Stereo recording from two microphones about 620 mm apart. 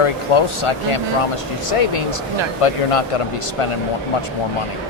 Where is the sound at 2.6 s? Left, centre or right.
Left.